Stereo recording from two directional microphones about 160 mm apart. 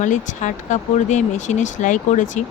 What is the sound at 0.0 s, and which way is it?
Speech, 50° left (ahead or behind).